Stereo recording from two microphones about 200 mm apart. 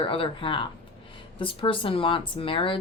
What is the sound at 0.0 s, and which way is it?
Speech, 25° left (ahead or behind).